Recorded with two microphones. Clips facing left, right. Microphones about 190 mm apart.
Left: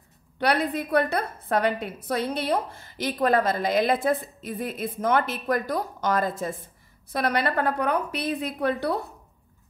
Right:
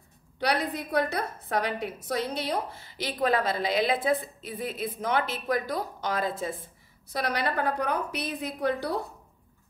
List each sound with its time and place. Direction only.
0.4 s a woman's voice: 60° left (ahead or behind)